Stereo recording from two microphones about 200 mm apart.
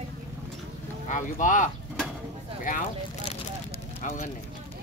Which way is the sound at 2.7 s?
40° left (ahead or behind).